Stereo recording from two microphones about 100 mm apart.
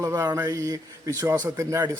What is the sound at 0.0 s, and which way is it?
Mantra, 30° right (ahead or behind).